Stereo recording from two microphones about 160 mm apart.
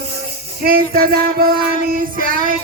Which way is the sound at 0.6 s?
70° right (ahead or behind).